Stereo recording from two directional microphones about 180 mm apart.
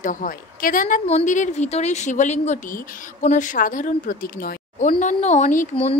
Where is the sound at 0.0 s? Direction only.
50° left (ahead or behind).